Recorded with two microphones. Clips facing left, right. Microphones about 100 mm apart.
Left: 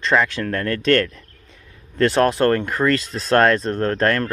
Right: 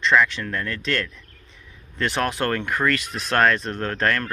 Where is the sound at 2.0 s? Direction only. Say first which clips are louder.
Left 8 dB; 35° left (ahead or behind).